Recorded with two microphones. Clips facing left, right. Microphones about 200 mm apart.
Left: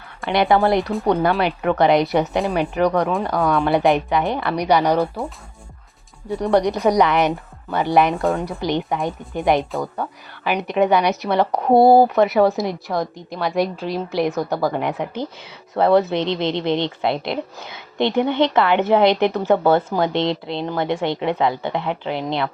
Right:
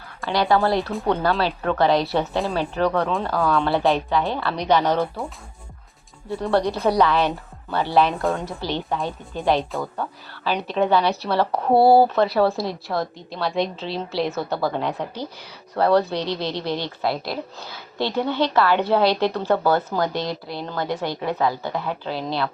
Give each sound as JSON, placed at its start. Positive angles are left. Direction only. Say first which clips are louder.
{"t": 0.2, "sound": "a woman's voice", "louder": "left 3 dB", "side_deg": 20}
{"t": 6.3, "sound": "a woman's voice", "louder": "left 3 dB", "side_deg": 15}